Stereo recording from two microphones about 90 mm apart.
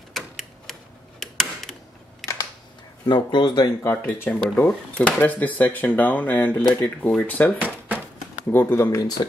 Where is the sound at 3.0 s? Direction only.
55° left (ahead or behind).